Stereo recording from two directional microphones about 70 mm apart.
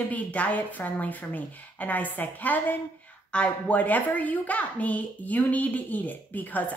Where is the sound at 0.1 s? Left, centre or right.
Left.